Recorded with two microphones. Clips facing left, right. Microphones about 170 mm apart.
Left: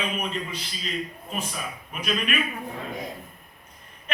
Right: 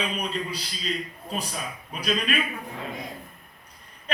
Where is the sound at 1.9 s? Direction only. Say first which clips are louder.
Right 1 dB; 35° right (ahead or behind).